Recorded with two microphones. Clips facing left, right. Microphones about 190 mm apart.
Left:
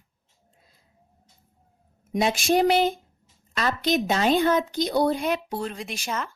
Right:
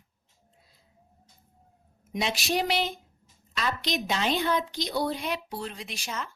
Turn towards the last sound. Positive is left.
turn(degrees=55)  # may be behind; listen again after turning